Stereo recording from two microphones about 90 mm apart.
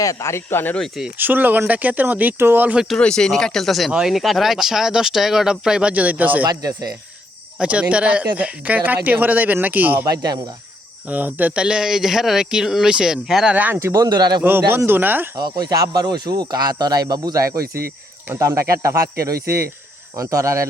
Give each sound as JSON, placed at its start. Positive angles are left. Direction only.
{"t": 0.0, "sound": "speech", "side_deg": 35}
{"t": 0.8, "sound": "speech", "side_deg": -5}
{"t": 1.2, "sound": "speech", "side_deg": -20}
{"t": 3.0, "sound": "speech", "side_deg": 10}
{"t": 6.5, "sound": "speech", "side_deg": -40}
{"t": 7.6, "sound": "speech", "side_deg": -10}
{"t": 10.1, "sound": "speech", "side_deg": -50}
{"t": 11.1, "sound": "speech", "side_deg": -20}
{"t": 13.7, "sound": "speech", "side_deg": -30}
{"t": 14.0, "sound": "speech", "side_deg": -50}
{"t": 14.8, "sound": "speech", "side_deg": -20}
{"t": 15.4, "sound": "speech", "side_deg": -50}